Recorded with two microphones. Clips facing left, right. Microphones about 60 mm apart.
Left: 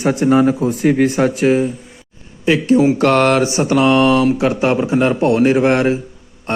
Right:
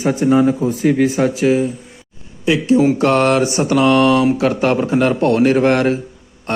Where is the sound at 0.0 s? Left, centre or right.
Left.